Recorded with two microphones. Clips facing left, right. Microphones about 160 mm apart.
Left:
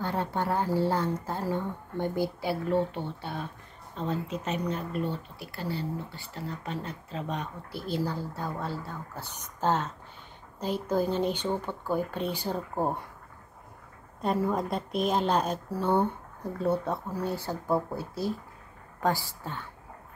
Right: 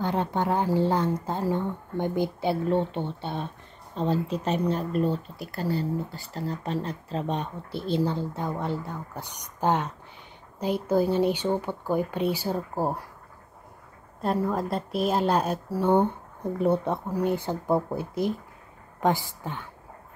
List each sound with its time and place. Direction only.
0.0 s a woman's voice: 20° right (ahead or behind); by 13.0 s 5° right (ahead or behind)
14.2 s a woman's voice: centre (ahead or behind); by 19.6 s 15° right (ahead or behind)